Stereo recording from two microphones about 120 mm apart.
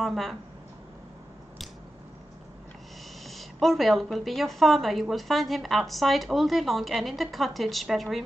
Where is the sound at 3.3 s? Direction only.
Centre (ahead or behind).